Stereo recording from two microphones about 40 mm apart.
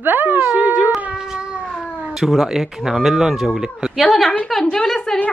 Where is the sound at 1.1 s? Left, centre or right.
Centre.